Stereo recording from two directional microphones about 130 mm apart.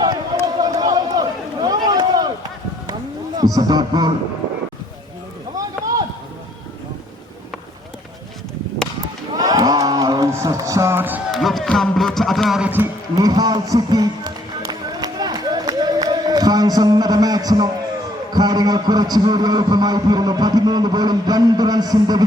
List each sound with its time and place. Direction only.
0.0 s run: 30° right (ahead or behind)
3.3 s a man's voice: 30° right (ahead or behind)
5.5 s run: 25° right (ahead or behind)
9.3 s a sound: 30° right (ahead or behind)
11.3 s music: centre (ahead or behind)
13.1 s music: 30° right (ahead or behind)
18.3 s a man's voice: 30° right (ahead or behind)